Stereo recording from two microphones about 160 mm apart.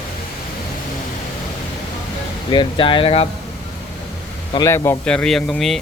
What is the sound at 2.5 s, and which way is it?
Speech, 30° left (ahead or behind).